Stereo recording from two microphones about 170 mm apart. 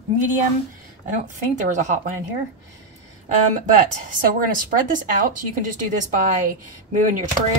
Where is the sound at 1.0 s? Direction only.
45° right (ahead or behind).